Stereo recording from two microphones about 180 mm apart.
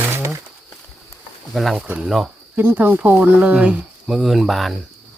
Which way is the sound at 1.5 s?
Centre (ahead or behind).